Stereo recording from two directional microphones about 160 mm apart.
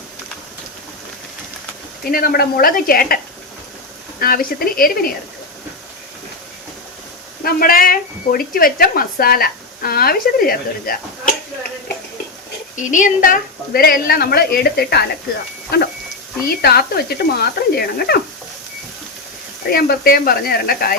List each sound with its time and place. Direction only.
2.0 s speech: 70° left (ahead or behind)
4.2 s a woman's voice: 65° left (ahead or behind)
7.4 s speech: 65° left (ahead or behind)
12.7 s speech: 50° left (ahead or behind); by 15.1 s 80° left
16.5 s speech: 75° left (ahead or behind)
19.7 s speech: 70° left (ahead or behind)